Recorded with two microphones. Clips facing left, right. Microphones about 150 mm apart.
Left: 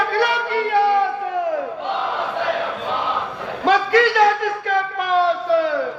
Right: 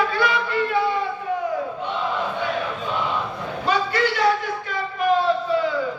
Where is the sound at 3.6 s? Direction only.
90° left; by 5.7 s 75° left (ahead or behind).